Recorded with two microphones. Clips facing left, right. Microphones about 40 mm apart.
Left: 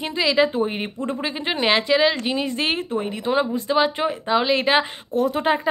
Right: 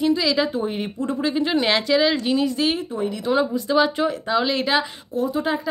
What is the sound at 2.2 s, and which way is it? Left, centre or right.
A woman's voice, left.